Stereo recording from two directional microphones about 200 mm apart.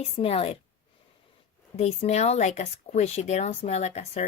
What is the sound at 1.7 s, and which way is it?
Speech, 35° left (ahead or behind).